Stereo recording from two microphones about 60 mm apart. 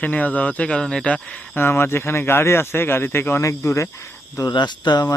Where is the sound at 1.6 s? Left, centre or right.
Left.